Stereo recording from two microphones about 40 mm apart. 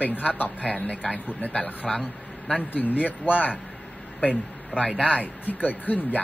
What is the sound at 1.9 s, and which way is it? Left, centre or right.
Speech, centre.